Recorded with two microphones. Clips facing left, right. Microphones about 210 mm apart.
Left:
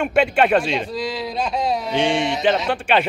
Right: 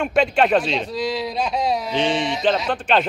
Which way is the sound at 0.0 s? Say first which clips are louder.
Left 1 dB; 5° left (ahead or behind).